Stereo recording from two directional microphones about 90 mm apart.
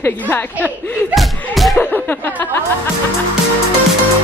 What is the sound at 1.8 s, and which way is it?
Speech, 20° left (ahead or behind).